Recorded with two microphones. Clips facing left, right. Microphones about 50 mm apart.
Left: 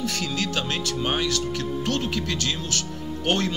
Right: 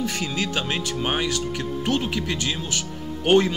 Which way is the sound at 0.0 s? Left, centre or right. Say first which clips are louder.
Right 1 dB; centre.